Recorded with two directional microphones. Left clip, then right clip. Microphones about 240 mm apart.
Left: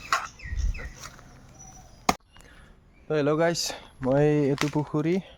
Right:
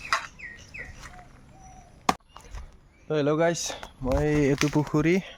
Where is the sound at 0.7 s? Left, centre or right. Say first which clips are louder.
Right 3 dB; right.